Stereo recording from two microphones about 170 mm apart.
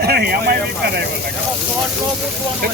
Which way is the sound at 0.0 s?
70° right (ahead or behind).